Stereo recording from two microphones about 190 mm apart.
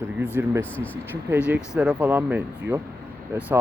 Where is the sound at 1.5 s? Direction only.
5° right (ahead or behind).